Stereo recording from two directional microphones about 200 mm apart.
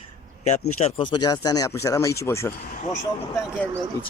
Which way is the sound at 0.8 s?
25° left (ahead or behind).